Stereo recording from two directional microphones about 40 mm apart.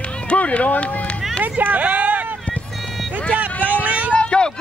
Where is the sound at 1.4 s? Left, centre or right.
Right.